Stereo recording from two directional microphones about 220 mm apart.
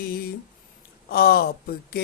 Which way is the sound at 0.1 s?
45° left (ahead or behind).